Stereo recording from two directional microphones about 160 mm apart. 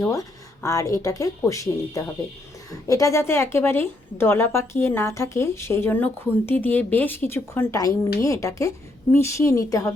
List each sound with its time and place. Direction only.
0.0 s a woman's voice: 20° left (ahead or behind)